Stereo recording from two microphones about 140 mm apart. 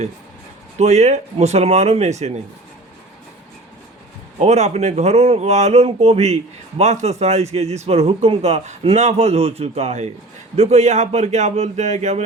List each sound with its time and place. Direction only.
0.8 s speech: 55° right (ahead or behind)
4.4 s speech: 50° right (ahead or behind)